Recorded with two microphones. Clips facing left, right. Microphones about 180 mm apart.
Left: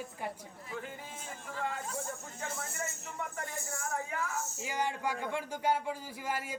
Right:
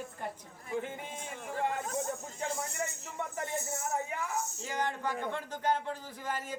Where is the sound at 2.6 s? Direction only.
20° right (ahead or behind).